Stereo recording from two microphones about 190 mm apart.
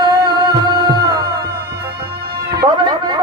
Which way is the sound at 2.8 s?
25° right (ahead or behind).